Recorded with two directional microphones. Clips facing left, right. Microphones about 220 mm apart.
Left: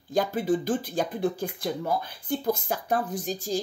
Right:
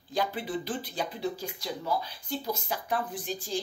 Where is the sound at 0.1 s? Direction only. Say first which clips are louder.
Left 6 dB; 45° left (ahead or behind).